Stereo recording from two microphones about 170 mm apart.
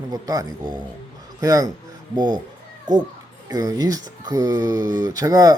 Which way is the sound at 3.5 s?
20° right (ahead or behind).